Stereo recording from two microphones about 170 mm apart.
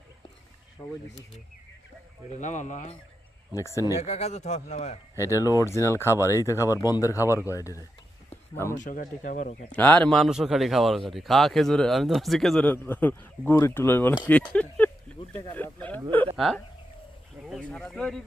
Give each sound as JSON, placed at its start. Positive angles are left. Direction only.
{"t": 2.3, "sound": "speech", "side_deg": 45}
{"t": 3.5, "sound": "speech", "side_deg": 15}
{"t": 4.0, "sound": "a man's voice", "side_deg": 40}
{"t": 5.1, "sound": "speech", "side_deg": 20}
{"t": 8.7, "sound": "speech", "side_deg": 50}
{"t": 9.7, "sound": "speech", "side_deg": 10}